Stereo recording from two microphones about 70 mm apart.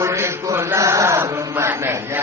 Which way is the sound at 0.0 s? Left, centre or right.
Right.